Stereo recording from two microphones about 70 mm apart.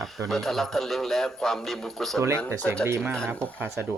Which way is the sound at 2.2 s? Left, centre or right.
Right.